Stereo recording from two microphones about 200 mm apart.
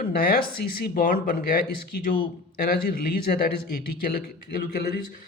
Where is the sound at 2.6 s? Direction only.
50° left (ahead or behind).